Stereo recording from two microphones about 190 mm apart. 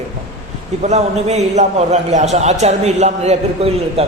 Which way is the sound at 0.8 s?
35° right (ahead or behind).